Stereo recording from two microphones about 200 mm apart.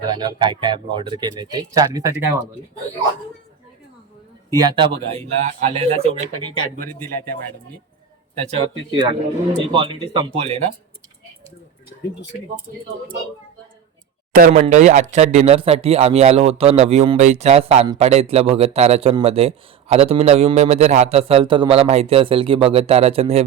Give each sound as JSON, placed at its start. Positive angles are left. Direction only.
{"t": 0.1, "sound": "a man's voice", "side_deg": -20}
{"t": 4.5, "sound": "a man's voice", "side_deg": -20}
{"t": 5.4, "sound": "speech", "side_deg": -35}
{"t": 7.1, "sound": "speech", "side_deg": -50}
{"t": 9.0, "sound": "a man's voice", "side_deg": -25}
{"t": 14.3, "sound": "a man's voice", "side_deg": -45}